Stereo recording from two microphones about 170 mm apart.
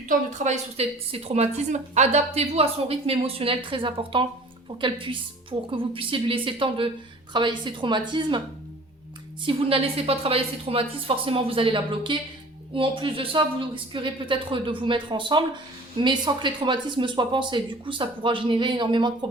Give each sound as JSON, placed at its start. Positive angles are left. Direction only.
{"t": 0.1, "sound": "a woman's voice", "side_deg": -40}
{"t": 9.4, "sound": "a woman's voice", "side_deg": -30}